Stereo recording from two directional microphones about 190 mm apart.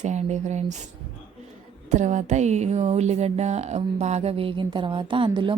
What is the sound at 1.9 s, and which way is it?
Speech, 40° right (ahead or behind).